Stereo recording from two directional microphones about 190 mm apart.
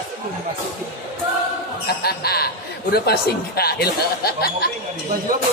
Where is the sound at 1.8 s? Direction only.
55° left (ahead or behind).